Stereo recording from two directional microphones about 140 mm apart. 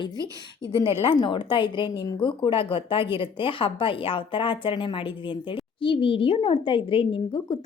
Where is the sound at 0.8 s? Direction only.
40° left (ahead or behind).